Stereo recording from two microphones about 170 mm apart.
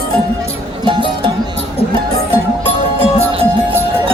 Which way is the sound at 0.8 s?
30° right (ahead or behind).